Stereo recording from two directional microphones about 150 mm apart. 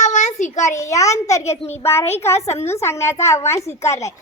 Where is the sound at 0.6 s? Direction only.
20° left (ahead or behind).